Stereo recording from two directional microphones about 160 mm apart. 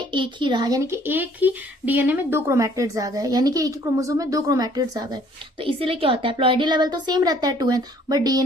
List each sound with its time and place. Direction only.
0.0 s speech: 30° right (ahead or behind)